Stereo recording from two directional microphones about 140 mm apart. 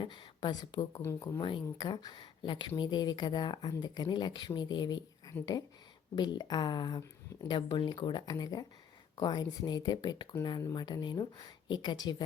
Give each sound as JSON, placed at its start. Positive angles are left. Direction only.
{"t": 0.0, "sound": "speech", "side_deg": 35}
{"t": 1.0, "sound": "speech", "side_deg": 20}
{"t": 1.4, "sound": "speech", "side_deg": 35}